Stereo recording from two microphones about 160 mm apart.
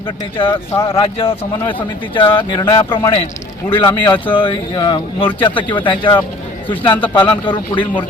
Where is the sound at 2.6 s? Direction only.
20° left (ahead or behind).